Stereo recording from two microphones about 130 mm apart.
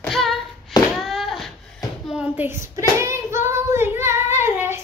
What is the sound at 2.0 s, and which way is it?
Child singing, 10° right (ahead or behind).